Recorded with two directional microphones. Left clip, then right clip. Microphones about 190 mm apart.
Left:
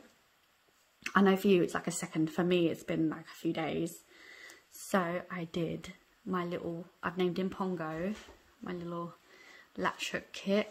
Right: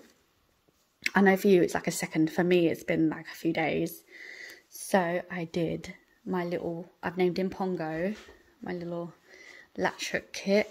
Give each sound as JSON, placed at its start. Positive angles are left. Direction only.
{"t": 1.1, "sound": "speech", "side_deg": -15}